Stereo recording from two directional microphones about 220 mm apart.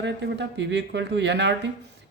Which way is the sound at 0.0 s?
55° right (ahead or behind).